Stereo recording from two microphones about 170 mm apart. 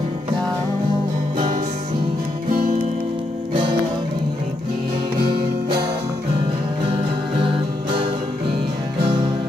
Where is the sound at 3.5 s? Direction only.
30° right (ahead or behind).